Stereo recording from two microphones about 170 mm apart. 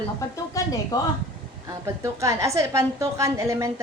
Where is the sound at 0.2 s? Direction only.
20° left (ahead or behind).